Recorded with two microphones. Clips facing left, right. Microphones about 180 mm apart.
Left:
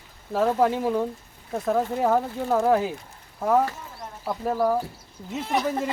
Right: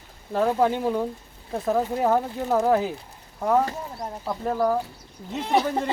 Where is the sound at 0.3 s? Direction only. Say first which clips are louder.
Even; centre (ahead or behind).